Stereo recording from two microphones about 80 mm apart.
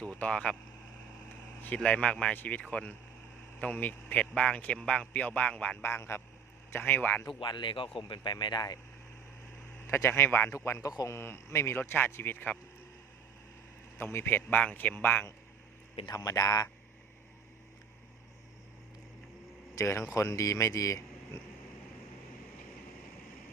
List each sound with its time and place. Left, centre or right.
0.0 s a man's voice: centre
1.6 s a man's voice: centre
5.8 s speech: left
7.3 s speech: left
8.1 s speech: left
9.8 s speech: left
10.5 s speech: left
14.0 s speech: left
16.0 s speech: left
19.8 s speech: left